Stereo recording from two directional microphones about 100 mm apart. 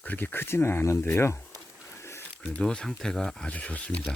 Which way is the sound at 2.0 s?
25° left (ahead or behind).